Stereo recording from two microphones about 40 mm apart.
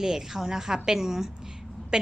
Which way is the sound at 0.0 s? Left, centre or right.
Centre.